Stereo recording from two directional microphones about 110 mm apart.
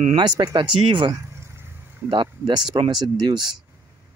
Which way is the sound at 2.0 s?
45° right (ahead or behind).